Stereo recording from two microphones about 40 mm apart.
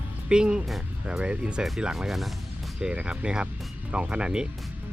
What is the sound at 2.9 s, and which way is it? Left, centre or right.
Speech, right.